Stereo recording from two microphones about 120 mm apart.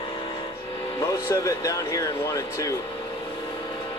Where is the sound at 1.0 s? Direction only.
25° left (ahead or behind).